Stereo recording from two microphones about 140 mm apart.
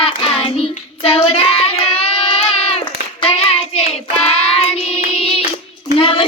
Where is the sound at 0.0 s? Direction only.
40° left (ahead or behind).